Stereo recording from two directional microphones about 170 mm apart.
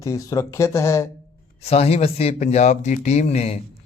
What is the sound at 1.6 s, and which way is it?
A man's voice, 35° left (ahead or behind).